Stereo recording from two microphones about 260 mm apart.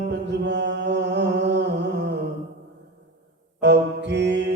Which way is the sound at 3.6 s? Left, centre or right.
Right.